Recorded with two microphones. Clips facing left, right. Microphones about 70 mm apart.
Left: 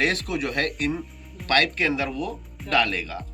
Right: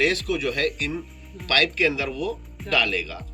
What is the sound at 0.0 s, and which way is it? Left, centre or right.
Speech, left.